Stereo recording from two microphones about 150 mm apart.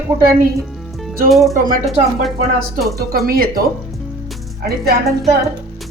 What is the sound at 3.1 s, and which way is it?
Speech, 80° right.